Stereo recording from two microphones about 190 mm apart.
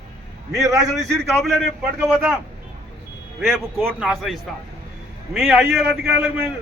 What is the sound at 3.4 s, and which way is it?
A man's voice, 5° right (ahead or behind).